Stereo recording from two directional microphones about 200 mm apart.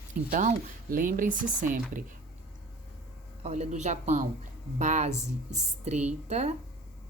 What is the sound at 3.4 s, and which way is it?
Speech, 35° right (ahead or behind).